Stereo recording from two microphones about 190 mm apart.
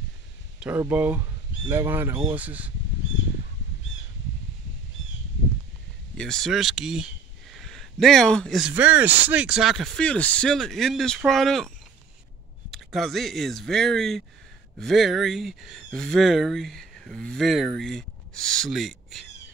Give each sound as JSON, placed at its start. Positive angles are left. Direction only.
{"t": 0.6, "sound": "speech", "side_deg": -10}
{"t": 6.1, "sound": "speech", "side_deg": 5}
{"t": 12.7, "sound": "speech", "side_deg": 0}